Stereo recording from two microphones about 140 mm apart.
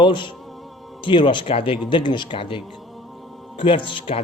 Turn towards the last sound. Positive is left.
turn(degrees=40)  # may be behind; listen again after turning